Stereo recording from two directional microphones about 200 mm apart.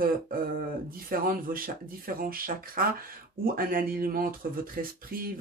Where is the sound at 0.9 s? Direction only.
45° right (ahead or behind).